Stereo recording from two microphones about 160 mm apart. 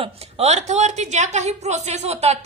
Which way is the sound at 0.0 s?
40° right (ahead or behind).